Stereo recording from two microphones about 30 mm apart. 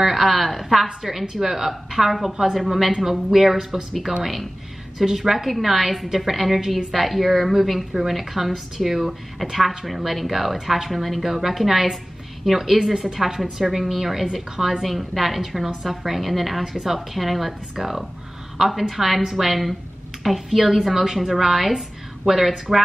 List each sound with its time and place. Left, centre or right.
0.0 s a woman's voice: centre
4.2 s a woman's voice: centre
14.8 s a woman's voice: centre